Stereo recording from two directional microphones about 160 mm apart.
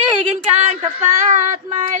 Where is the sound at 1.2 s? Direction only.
50° right (ahead or behind).